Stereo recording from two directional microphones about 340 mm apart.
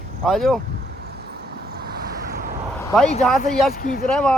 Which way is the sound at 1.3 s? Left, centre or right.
Right.